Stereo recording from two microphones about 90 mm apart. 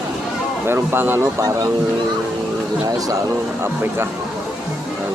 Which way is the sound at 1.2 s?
40° right (ahead or behind).